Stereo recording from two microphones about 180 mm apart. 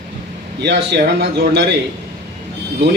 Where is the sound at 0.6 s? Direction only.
75° right (ahead or behind).